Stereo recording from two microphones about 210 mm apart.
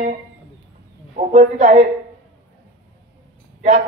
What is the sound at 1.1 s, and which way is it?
Speech, 35° right (ahead or behind).